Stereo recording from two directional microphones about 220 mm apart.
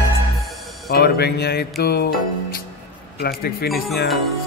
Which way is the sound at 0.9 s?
45° left (ahead or behind).